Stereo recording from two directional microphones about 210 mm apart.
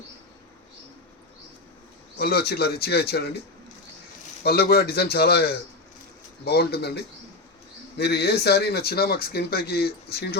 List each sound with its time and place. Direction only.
2.1 s speech: 50° left (ahead or behind)
4.4 s speech: 45° left (ahead or behind)